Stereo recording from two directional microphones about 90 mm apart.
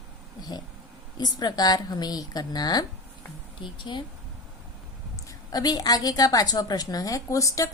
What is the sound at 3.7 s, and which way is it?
Speech, 65° left (ahead or behind).